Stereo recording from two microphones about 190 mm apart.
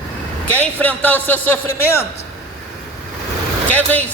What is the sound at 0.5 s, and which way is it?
A man's voice, 10° left (ahead or behind).